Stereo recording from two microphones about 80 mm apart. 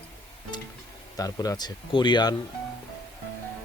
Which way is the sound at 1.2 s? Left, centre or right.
Left.